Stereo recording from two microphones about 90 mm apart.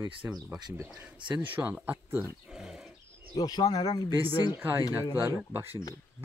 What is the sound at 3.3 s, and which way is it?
Speech, 45° left (ahead or behind).